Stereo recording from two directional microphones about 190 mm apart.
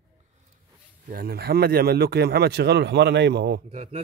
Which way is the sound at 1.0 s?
50° right (ahead or behind).